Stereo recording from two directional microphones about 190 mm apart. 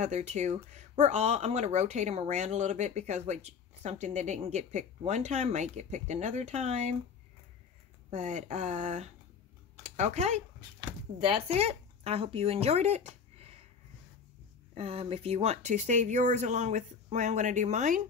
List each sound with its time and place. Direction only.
0.0 s speech: 35° right (ahead or behind)
8.1 s speech: 40° right (ahead or behind)
14.7 s speech: 30° right (ahead or behind)